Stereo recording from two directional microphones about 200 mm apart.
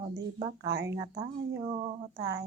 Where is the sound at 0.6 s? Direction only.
60° right (ahead or behind).